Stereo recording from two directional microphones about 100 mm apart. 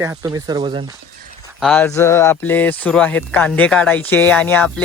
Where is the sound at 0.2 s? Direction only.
35° right (ahead or behind).